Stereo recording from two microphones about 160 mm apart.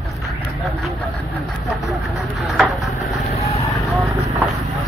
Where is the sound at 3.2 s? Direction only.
40° left (ahead or behind).